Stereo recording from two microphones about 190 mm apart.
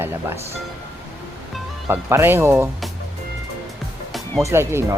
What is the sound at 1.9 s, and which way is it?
Speech, 10° right (ahead or behind).